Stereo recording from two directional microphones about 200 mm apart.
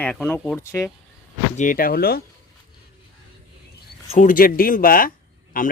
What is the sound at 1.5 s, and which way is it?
Speech, 45° left (ahead or behind).